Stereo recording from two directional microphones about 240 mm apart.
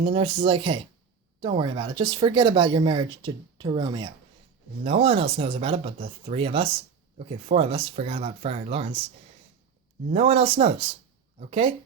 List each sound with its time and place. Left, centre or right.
0.0 s speech: right
10.1 s speech: right